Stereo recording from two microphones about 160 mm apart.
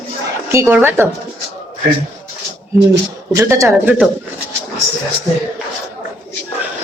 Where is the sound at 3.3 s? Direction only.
20° right (ahead or behind).